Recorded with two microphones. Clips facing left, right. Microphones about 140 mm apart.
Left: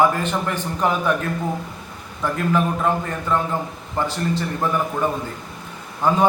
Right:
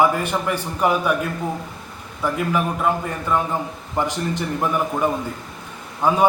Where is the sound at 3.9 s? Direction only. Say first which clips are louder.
Even; 15° right (ahead or behind).